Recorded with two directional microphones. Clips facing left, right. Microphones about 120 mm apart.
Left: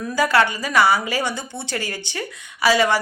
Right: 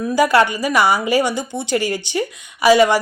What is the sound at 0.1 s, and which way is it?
Speech, 15° right (ahead or behind).